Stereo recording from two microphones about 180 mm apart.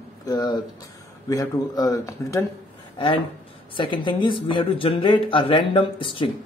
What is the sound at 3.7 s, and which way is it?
Speech, 25° left (ahead or behind).